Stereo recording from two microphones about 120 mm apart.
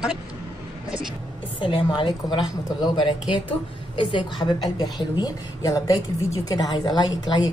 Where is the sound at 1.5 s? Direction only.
45° left (ahead or behind).